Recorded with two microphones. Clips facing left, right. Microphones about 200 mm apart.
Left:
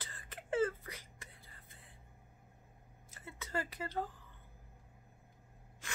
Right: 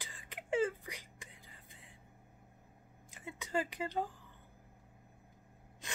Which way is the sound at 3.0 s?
15° right (ahead or behind).